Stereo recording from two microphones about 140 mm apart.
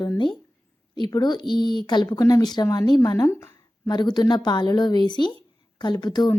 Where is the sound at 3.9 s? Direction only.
30° left (ahead or behind).